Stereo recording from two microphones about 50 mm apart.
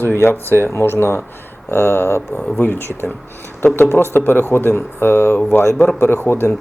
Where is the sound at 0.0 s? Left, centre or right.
Left.